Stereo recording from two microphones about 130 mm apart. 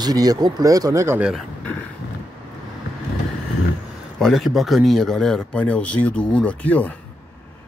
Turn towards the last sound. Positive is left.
turn(degrees=10)  # may be behind; listen again after turning